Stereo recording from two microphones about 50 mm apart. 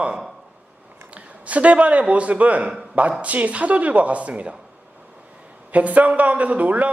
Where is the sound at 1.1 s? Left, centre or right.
Right.